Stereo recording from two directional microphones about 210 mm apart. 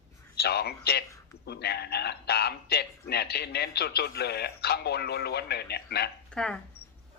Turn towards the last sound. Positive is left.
turn(degrees=5)  # may be behind; listen again after turning